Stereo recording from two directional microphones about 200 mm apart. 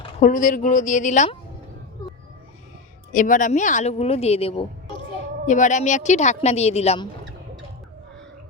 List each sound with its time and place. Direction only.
0.2 s a woman's voice: 40° left (ahead or behind)
3.1 s a woman's voice: 40° left (ahead or behind)